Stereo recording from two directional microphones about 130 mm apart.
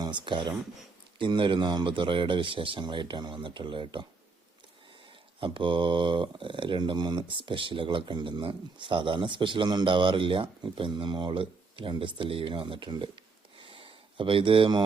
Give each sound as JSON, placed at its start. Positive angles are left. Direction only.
{"t": 0.0, "sound": "speech", "side_deg": -35}
{"t": 5.4, "sound": "speech", "side_deg": -40}